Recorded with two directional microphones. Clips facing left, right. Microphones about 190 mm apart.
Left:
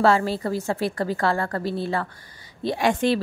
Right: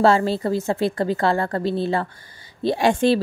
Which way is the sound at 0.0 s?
25° right (ahead or behind).